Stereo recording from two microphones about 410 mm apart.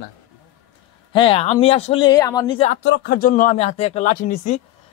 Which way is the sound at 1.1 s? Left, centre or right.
Centre.